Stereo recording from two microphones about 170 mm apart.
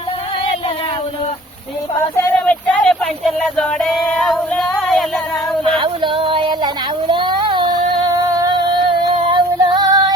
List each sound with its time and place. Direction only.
2.0 s speech: 15° left (ahead or behind)
5.6 s a sound: 30° right (ahead or behind)
8.4 s music: 25° right (ahead or behind)